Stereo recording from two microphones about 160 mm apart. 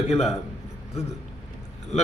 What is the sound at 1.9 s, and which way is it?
Speech, 45° left (ahead or behind).